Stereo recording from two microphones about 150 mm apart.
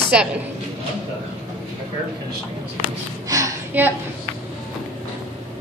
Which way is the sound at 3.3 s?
20° right (ahead or behind).